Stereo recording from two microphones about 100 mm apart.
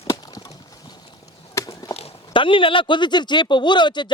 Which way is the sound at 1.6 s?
30° left (ahead or behind).